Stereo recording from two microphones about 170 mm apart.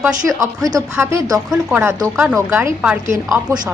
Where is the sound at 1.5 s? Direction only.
5° right (ahead or behind).